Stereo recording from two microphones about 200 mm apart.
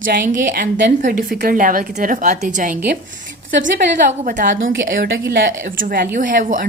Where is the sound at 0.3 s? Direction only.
40° right (ahead or behind).